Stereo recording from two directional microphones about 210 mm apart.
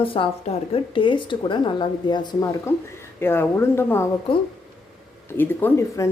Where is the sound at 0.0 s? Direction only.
25° left (ahead or behind).